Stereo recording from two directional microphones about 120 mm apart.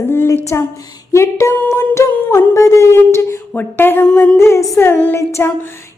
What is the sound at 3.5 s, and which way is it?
Speech, 15° left (ahead or behind).